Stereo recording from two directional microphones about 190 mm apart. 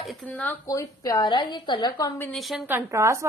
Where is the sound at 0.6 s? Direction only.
20° left (ahead or behind).